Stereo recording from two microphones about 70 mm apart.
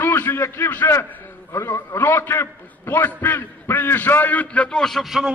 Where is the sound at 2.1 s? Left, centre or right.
Left; by 5.2 s centre.